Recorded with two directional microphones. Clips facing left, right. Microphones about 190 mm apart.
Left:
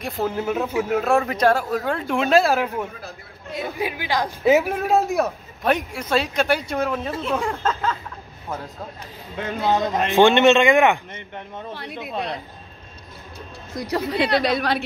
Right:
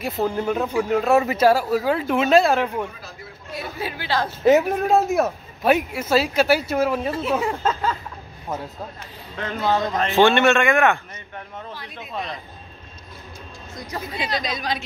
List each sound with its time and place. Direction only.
0.0 s speech: centre (ahead or behind)
3.5 s speech: 15° left (ahead or behind); by 7.9 s 5° right (ahead or behind)
9.4 s a man's voice: 10° left (ahead or behind)
12.0 s speech: 65° left (ahead or behind)
13.8 s speech: 70° left (ahead or behind)